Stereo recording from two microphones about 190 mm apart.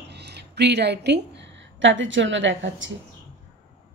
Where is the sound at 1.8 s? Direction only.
80° right.